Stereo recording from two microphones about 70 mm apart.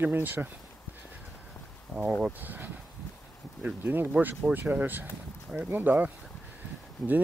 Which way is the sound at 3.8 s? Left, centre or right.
Right.